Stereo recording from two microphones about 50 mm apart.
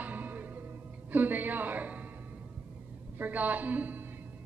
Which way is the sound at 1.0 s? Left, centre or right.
Right.